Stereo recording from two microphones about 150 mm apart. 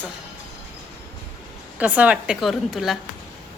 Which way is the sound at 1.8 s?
10° right (ahead or behind).